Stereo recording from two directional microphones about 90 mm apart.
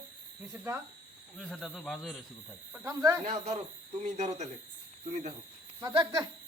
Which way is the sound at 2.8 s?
35° right (ahead or behind).